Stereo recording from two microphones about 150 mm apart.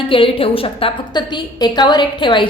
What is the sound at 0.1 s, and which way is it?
A woman's voice, 35° left (ahead or behind).